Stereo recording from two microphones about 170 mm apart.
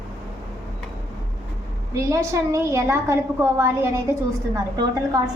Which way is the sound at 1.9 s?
15° right (ahead or behind).